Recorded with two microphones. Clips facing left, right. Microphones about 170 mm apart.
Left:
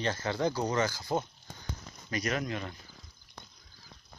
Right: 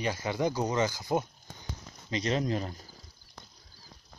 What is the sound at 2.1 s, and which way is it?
Speech, 30° right (ahead or behind).